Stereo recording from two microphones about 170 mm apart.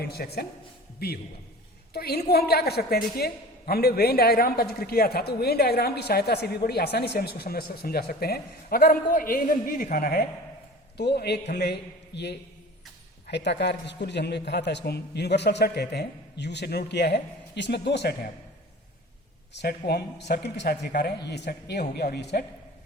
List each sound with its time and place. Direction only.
0.0 s a man's voice: 65° left (ahead or behind)
19.5 s a woman's voice: 75° left (ahead or behind)